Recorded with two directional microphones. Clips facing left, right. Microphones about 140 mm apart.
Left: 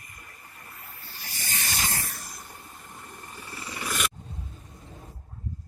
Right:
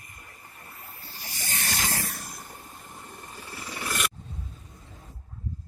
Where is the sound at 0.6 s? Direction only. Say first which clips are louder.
Right 1 dB; 30° right (ahead or behind).